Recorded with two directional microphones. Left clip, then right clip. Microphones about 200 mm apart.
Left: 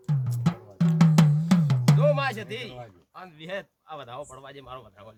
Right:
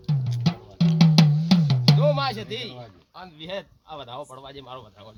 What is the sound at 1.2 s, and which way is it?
Music, 35° left (ahead or behind).